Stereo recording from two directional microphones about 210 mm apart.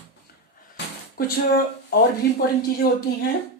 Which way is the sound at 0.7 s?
50° left (ahead or behind).